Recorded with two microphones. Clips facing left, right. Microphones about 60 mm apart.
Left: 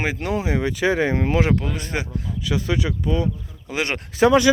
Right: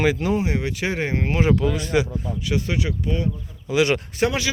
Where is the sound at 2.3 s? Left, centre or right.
Right.